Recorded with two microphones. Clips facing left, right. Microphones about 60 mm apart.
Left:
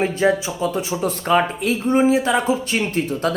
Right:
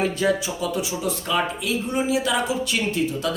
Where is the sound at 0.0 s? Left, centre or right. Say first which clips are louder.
Left 4 dB; left.